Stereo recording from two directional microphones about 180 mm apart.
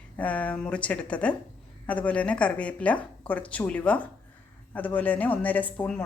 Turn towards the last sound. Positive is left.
turn(degrees=5)  # may be behind; listen again after turning